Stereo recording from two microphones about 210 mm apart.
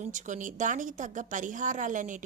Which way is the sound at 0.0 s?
35° right (ahead or behind).